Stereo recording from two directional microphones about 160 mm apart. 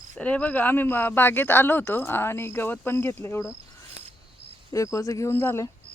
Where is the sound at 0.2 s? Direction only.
10° left (ahead or behind).